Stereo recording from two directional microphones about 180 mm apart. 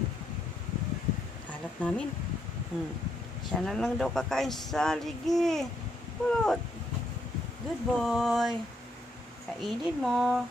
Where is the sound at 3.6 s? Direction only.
5° left (ahead or behind).